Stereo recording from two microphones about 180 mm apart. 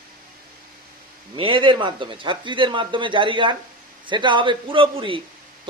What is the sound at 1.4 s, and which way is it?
A man's voice, 30° right (ahead or behind).